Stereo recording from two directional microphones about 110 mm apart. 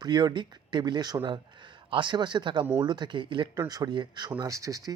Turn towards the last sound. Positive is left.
turn(degrees=-30)  # may be behind; listen again after turning